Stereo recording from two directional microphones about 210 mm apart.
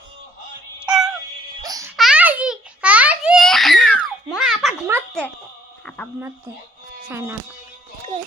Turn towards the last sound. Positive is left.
turn(degrees=-10)  # may be behind; listen again after turning